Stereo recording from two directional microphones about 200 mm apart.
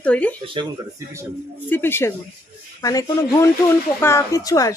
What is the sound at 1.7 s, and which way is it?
Speech, 10° left (ahead or behind).